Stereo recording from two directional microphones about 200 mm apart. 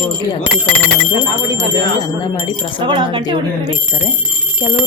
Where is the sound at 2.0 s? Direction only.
20° left (ahead or behind).